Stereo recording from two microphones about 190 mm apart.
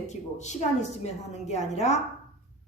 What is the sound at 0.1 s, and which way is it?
A woman's voice, 35° left (ahead or behind).